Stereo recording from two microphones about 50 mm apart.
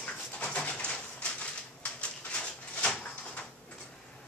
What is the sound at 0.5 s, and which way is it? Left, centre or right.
Bird, left.